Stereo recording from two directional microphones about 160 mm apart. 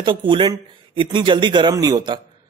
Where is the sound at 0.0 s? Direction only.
30° right (ahead or behind).